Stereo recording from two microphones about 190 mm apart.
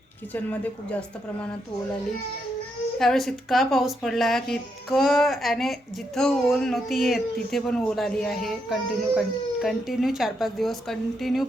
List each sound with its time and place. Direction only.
0.3 s speech: 5° left (ahead or behind)
3.0 s speech: centre (ahead or behind)